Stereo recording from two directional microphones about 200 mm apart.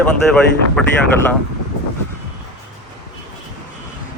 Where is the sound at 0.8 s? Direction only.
5° left (ahead or behind).